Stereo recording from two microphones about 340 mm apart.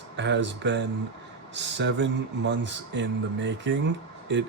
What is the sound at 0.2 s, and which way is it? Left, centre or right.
Speech, right.